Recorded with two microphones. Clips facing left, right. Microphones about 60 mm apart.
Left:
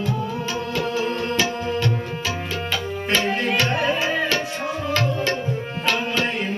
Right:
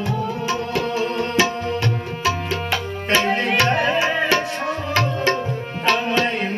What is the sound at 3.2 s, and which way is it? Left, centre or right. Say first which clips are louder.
Tabla: right 2 dB; right.